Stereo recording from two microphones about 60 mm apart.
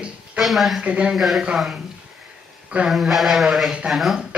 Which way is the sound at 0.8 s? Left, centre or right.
Centre.